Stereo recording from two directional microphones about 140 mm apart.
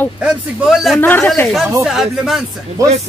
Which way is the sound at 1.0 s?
15° left (ahead or behind).